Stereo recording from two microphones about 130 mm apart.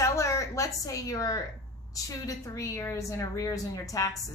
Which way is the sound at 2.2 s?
25° left (ahead or behind).